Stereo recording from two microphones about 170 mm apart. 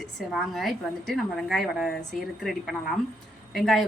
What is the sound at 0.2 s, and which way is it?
A woman's voice, centre (ahead or behind).